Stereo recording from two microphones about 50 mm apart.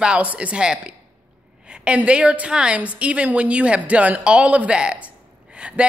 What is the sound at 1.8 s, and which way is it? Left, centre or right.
Speech, right.